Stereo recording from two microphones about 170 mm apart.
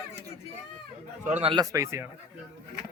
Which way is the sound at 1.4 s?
35° right (ahead or behind).